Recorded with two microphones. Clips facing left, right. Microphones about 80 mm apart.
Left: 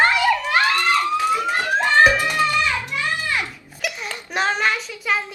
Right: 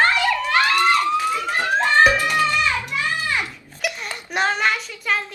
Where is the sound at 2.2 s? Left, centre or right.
Centre.